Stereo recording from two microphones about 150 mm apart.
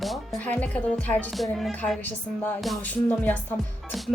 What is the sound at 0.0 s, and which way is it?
Speech, centre (ahead or behind).